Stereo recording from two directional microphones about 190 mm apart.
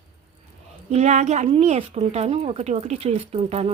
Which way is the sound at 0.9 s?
35° right (ahead or behind).